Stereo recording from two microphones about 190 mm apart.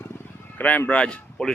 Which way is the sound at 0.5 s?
10° left (ahead or behind).